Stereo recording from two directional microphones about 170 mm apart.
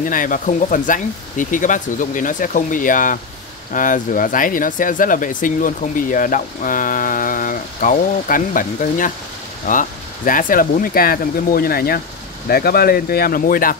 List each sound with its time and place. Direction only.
0.0 s speech: 50° left (ahead or behind)